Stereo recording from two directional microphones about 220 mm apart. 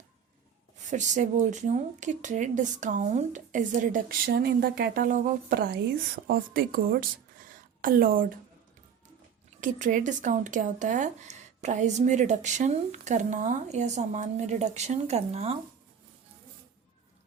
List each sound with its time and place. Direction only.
0.8 s speech: 35° right (ahead or behind)
4.3 s speech: 45° right (ahead or behind)
9.6 s speech: 35° right (ahead or behind)